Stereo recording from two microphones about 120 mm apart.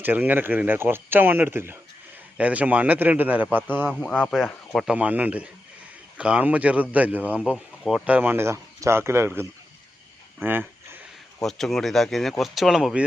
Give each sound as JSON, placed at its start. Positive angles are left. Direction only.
{"t": 0.0, "sound": "speech", "side_deg": -15}
{"t": 4.0, "sound": "speech", "side_deg": 10}
{"t": 4.9, "sound": "speech", "side_deg": -10}
{"t": 10.4, "sound": "a sound", "side_deg": -15}
{"t": 11.3, "sound": "speech", "side_deg": 5}